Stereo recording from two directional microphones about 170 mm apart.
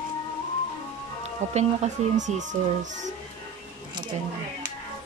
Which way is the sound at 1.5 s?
45° right (ahead or behind).